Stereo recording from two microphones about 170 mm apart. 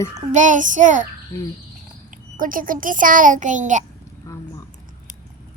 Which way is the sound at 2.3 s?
55° right (ahead or behind).